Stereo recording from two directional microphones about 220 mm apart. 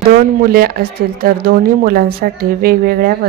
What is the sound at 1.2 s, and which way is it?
A woman's voice, 45° right (ahead or behind).